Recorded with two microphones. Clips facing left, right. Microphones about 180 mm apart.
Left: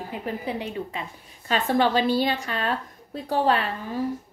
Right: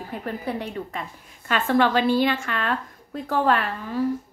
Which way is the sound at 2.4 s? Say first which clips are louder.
Even; 35° left (ahead or behind).